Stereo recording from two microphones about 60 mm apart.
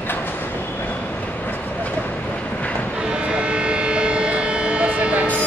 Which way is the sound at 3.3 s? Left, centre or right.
Centre.